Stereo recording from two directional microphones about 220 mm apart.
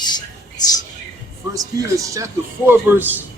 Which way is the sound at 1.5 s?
15° right (ahead or behind).